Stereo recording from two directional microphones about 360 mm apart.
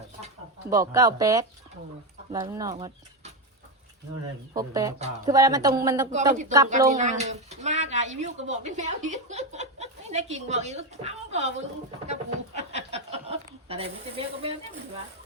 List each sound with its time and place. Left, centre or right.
0.8 s speech: centre
4.5 s speech: centre
12.5 s a sound: centre